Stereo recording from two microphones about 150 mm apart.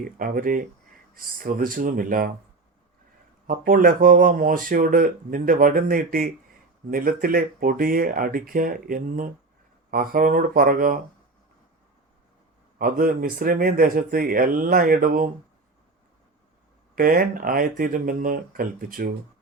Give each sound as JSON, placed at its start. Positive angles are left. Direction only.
{"t": 0.0, "sound": "speech", "side_deg": -70}
{"t": 3.4, "sound": "speech", "side_deg": -70}
{"t": 12.8, "sound": "speech", "side_deg": -70}
{"t": 16.9, "sound": "speech", "side_deg": -75}